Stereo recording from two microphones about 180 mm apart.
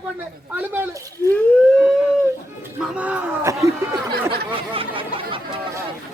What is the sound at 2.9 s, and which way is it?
Speech, 10° right (ahead or behind).